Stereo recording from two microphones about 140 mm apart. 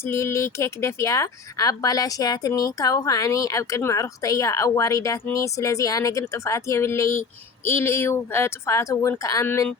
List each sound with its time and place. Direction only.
0.0 s speech: 20° left (ahead or behind)